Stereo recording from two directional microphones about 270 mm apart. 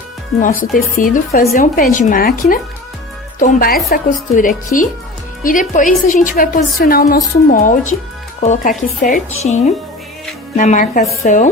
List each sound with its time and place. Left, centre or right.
0.4 s speech: left